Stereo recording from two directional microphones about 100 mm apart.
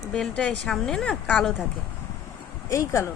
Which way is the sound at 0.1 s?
10° left (ahead or behind).